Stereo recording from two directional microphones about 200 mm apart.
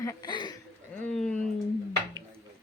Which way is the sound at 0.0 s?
20° left (ahead or behind).